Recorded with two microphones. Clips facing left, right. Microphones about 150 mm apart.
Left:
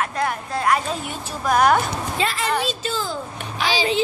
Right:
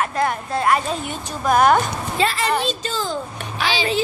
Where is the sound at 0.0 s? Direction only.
Centre (ahead or behind).